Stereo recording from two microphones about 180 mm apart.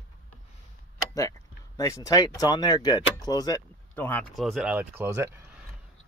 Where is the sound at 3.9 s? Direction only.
10° left (ahead or behind); by 5.3 s 15° right (ahead or behind).